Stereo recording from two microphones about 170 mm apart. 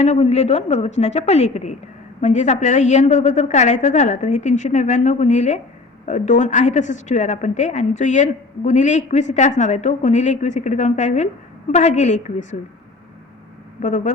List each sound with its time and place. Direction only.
0.0 s a woman's voice: 40° left (ahead or behind)
13.8 s a woman's voice: 45° left (ahead or behind)